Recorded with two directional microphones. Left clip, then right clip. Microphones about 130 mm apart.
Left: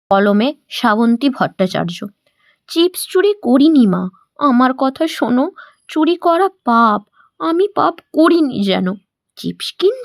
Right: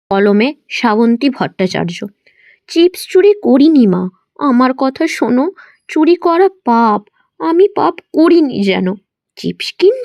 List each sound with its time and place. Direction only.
0.1 s speech: 10° right (ahead or behind)